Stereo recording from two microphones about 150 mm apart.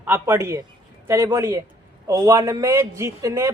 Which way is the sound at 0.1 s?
15° right (ahead or behind).